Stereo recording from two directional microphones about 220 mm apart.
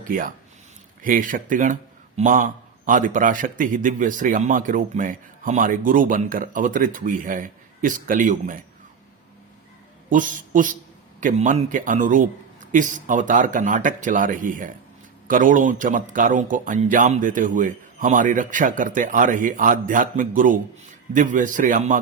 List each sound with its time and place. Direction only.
0.0 s speech: 40° right (ahead or behind)
10.1 s speech: 35° right (ahead or behind)